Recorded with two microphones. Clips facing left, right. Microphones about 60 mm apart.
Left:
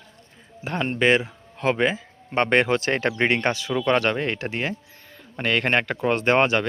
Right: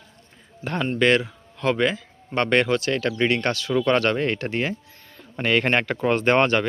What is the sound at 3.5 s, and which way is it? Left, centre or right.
Speech, centre.